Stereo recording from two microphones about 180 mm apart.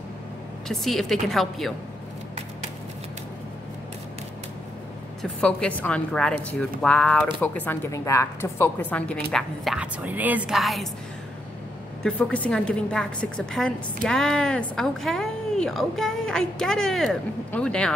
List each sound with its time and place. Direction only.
0.7 s speech: centre (ahead or behind)
5.2 s a woman's voice: 5° left (ahead or behind)
9.3 s speech: 5° right (ahead or behind)
12.0 s speech: 5° left (ahead or behind)